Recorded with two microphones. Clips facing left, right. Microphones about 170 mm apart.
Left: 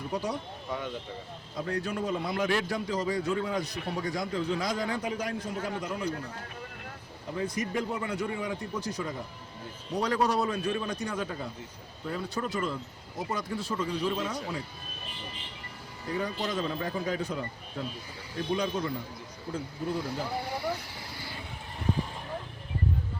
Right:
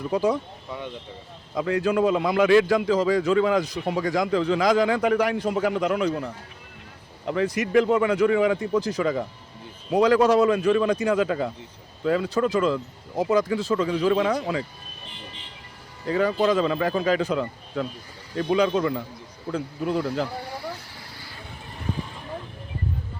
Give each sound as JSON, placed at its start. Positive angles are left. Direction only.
{"t": 1.5, "sound": "a man's voice", "side_deg": -90}
{"t": 16.0, "sound": "a man's voice", "side_deg": -90}
{"t": 19.5, "sound": "speech", "side_deg": -75}